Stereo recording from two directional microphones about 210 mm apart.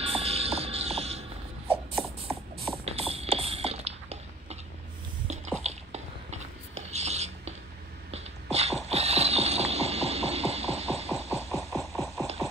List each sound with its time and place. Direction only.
0.0 s music: 30° right (ahead or behind)
2.0 s a sound: centre (ahead or behind)
2.8 s a sound: 30° right (ahead or behind)
8.1 s beatboxing: 30° right (ahead or behind)
8.8 s music: 30° right (ahead or behind)
11.1 s music: 15° left (ahead or behind)
11.7 s music: centre (ahead or behind)